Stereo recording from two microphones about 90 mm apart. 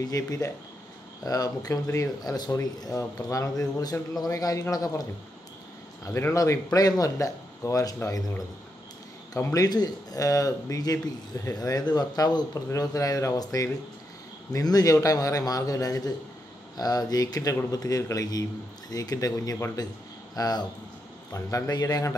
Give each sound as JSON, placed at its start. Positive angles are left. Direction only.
{"t": 0.0, "sound": "a man's voice", "side_deg": 40}
{"t": 6.0, "sound": "a man's voice", "side_deg": 35}
{"t": 9.4, "sound": "a man's voice", "side_deg": 35}
{"t": 12.5, "sound": "a man's voice", "side_deg": 35}